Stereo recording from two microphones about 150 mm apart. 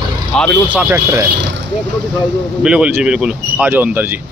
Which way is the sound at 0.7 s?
10° right (ahead or behind).